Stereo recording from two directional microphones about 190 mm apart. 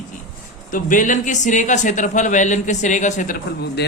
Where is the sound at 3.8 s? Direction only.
65° left (ahead or behind).